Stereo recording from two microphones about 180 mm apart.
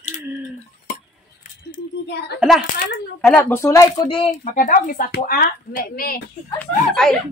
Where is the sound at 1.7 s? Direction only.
70° left (ahead or behind).